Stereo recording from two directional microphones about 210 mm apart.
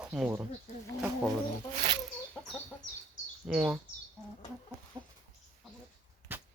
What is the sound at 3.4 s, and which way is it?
Speech, 5° right (ahead or behind).